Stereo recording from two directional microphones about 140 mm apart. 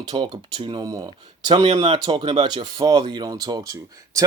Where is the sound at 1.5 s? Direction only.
50° right (ahead or behind).